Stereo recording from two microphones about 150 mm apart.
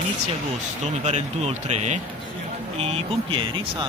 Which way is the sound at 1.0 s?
45° right (ahead or behind).